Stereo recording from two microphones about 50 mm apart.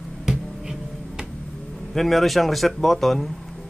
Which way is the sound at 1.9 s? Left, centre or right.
Centre.